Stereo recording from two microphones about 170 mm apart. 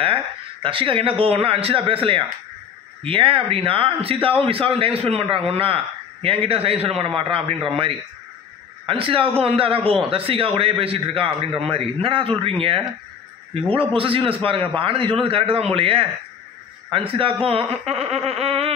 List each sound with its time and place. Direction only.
0.0 s speech: 30° right (ahead or behind)
8.8 s speech: 30° right (ahead or behind)